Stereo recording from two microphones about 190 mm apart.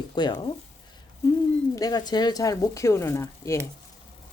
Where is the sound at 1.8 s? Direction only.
20° left (ahead or behind).